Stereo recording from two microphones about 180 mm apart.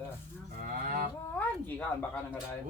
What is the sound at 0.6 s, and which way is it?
Speech, 50° right (ahead or behind).